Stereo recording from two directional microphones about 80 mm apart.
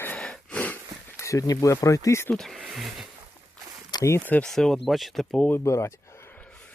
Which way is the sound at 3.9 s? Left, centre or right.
Left.